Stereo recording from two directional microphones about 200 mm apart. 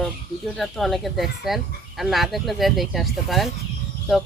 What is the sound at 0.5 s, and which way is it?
Speech, centre (ahead or behind).